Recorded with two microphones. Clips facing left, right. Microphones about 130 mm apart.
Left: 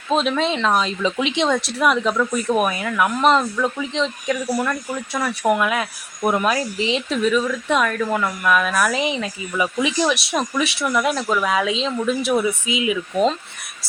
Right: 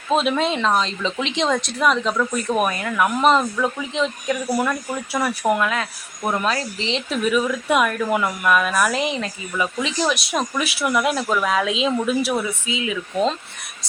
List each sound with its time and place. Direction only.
0.1 s speech: 5° right (ahead or behind)
7.1 s speech: 5° right (ahead or behind)
11.9 s speech: 15° right (ahead or behind)
12.6 s speech: 15° left (ahead or behind)